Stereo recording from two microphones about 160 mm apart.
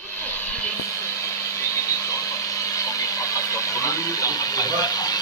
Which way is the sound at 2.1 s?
20° left (ahead or behind).